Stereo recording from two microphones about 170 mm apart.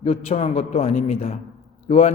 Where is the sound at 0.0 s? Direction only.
35° left (ahead or behind).